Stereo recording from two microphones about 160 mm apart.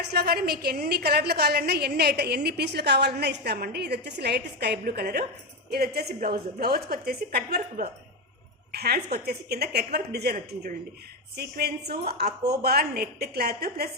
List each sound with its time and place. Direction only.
0.1 s a woman's voice: 80° right
8.7 s a woman's voice: 85° right
10.3 s speech: 55° right (ahead or behind)
11.3 s a woman's voice: 80° right